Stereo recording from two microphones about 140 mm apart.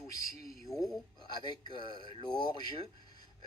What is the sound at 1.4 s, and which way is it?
A man's voice, 30° left (ahead or behind).